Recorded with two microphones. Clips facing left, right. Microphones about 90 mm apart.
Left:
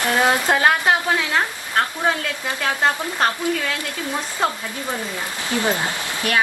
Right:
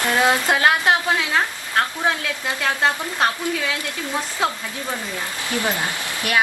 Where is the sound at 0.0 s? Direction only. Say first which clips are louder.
Even; 15° left (ahead or behind).